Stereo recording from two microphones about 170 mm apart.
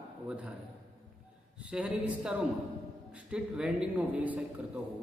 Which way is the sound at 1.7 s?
5° right (ahead or behind).